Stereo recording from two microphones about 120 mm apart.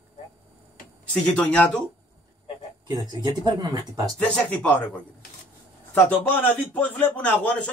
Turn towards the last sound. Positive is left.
turn(degrees=10)  # may be behind; listen again after turning